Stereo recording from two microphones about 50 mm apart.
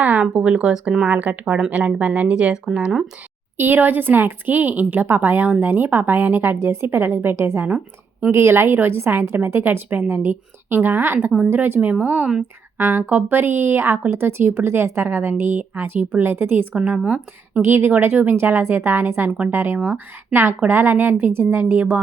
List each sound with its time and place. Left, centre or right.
0.0 s a sound: right
0.5 s speech: centre
2.2 s speech: centre
3.6 s a woman's voice: right
9.3 s speech: right
12.7 s speech: right
16.7 s speech: right
17.6 s speech: right
17.9 s speech: right